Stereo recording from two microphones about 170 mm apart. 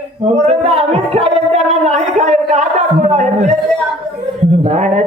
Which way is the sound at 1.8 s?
45° right (ahead or behind).